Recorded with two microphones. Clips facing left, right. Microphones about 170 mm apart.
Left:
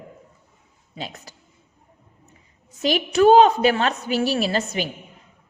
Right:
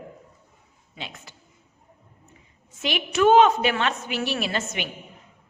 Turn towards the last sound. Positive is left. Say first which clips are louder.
# left 5 dB
turn(degrees=35)  # may be behind; listen again after turning